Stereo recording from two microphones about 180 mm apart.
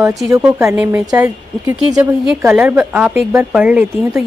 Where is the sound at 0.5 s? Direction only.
15° right (ahead or behind).